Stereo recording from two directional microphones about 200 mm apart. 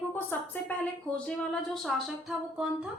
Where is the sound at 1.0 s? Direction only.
5° left (ahead or behind).